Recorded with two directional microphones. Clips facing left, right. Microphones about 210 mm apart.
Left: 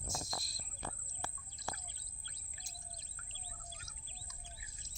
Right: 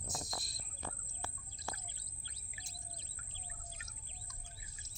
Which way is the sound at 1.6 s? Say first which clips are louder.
Left 1 dB; 30° right (ahead or behind).